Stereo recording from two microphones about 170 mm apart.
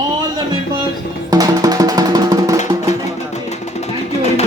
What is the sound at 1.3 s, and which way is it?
Music, 20° right (ahead or behind).